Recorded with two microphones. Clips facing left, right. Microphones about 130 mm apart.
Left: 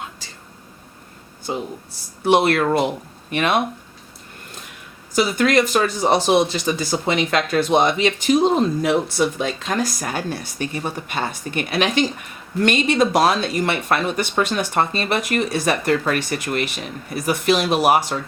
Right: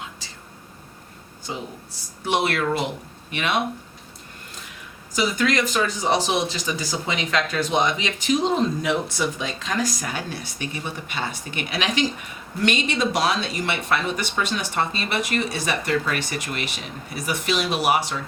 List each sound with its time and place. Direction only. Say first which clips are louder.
1.5 s speech: left 6 dB; 50° left (ahead or behind)
5.1 s speech: left 5 dB; 55° left (ahead or behind)